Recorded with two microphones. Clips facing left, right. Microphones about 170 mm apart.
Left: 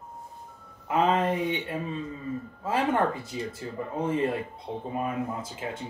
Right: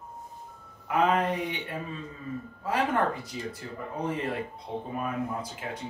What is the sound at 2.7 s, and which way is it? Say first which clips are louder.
Speech: left 1 dB; 25° left (ahead or behind).